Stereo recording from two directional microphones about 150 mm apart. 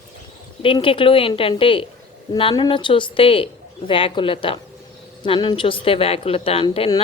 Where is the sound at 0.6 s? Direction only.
35° left (ahead or behind).